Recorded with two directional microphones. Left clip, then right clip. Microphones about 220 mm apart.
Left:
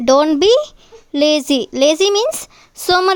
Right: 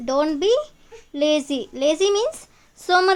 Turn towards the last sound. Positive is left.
turn(degrees=45)  # may be behind; listen again after turning